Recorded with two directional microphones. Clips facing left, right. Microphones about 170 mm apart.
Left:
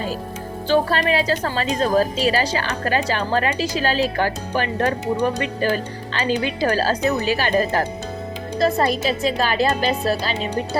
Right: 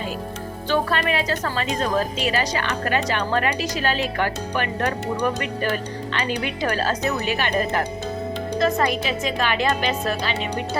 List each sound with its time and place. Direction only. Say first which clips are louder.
0.7 s a woman's voice: left 4 dB; 35° left (ahead or behind)